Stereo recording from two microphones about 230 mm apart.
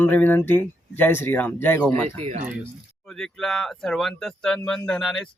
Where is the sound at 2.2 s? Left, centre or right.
Right.